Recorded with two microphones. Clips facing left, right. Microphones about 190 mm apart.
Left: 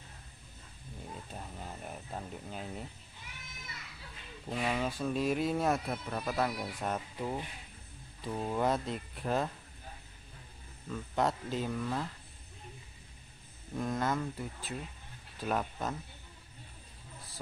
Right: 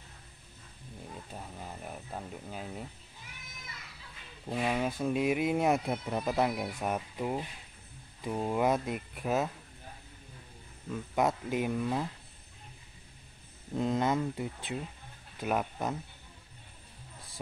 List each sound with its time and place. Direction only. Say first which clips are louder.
1.3 s a sound: right 1 dB; 5° right (ahead or behind)
4.5 s speech: right 2 dB; 10° right (ahead or behind)
10.9 s speech: right 2 dB; 10° right (ahead or behind)
13.7 s speech: right 4 dB; 20° right (ahead or behind)